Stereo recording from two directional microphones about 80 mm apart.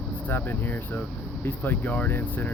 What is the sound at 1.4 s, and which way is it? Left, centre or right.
Speech, left.